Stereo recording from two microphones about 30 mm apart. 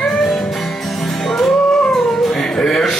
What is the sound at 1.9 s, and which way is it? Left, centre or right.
Howl, centre.